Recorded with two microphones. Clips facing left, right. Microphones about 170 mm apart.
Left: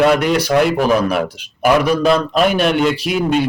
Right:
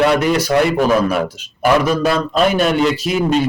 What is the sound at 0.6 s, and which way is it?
A man's voice, 5° left (ahead or behind).